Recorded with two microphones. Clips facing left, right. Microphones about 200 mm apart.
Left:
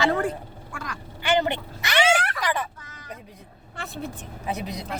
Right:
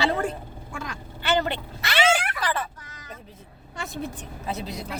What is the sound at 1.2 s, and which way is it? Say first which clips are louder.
Speech: left 2 dB; 15° left (ahead or behind).